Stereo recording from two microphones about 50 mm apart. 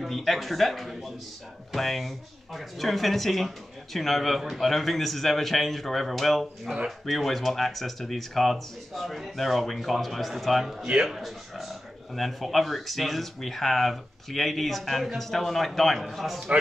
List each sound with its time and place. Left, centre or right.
0.0 s speech: centre